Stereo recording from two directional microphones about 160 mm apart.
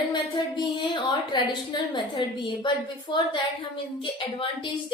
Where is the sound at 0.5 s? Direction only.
30° left (ahead or behind).